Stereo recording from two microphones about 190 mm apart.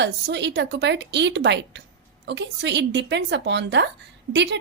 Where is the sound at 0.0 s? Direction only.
65° right (ahead or behind).